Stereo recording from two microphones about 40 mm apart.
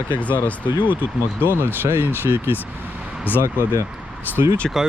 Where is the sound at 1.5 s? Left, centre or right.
Right.